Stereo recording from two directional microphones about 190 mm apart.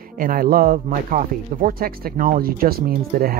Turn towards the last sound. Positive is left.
turn(degrees=-50)  # may be behind; listen again after turning